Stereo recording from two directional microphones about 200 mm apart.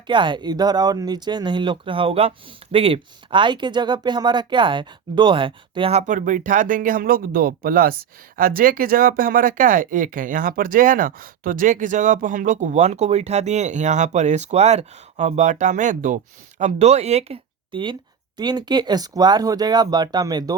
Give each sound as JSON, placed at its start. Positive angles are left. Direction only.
{"t": 0.1, "sound": "speech", "side_deg": -25}